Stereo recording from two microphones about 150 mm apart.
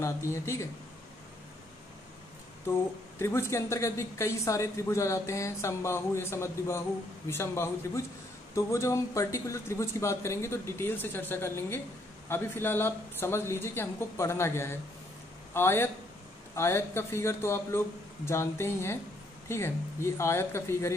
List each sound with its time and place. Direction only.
0.0 s a woman's voice: 20° left (ahead or behind)
3.2 s a woman's voice: 15° left (ahead or behind)